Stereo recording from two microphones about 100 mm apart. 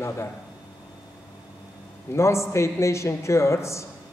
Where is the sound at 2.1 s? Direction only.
30° left (ahead or behind).